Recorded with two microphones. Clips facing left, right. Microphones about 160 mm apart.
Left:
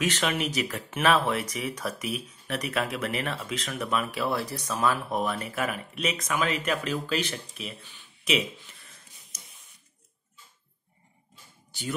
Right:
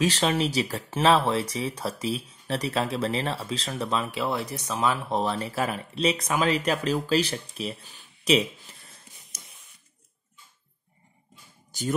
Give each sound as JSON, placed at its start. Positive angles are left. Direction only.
{"t": 0.0, "sound": "speech", "side_deg": -30}
{"t": 11.7, "sound": "speech", "side_deg": -40}